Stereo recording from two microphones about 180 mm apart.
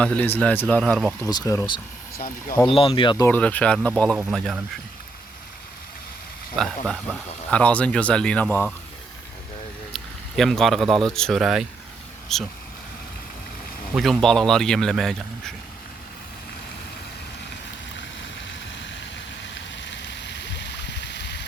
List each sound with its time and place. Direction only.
0.0 s speech: 10° left (ahead or behind)
1.2 s speech: 20° left (ahead or behind)
2.1 s speech: 55° left (ahead or behind)
2.6 s speech: 30° left (ahead or behind)
3.2 s speech: 10° left (ahead or behind)
6.6 s speech: centre (ahead or behind)
9.9 s a sound: centre (ahead or behind)
11.0 s speech: 5° left (ahead or behind)
13.9 s speech: centre (ahead or behind)
19.5 s stream: 85° left